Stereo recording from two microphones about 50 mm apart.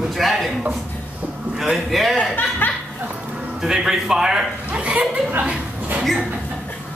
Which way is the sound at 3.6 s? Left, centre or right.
Centre.